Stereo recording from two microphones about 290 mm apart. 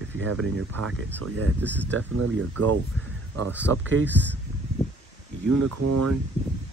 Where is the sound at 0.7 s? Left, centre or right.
Right.